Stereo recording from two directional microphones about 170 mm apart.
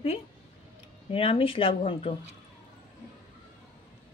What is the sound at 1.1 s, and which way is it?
Speech, 35° left (ahead or behind).